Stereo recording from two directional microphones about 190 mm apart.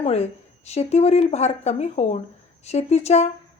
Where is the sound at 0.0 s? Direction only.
35° left (ahead or behind).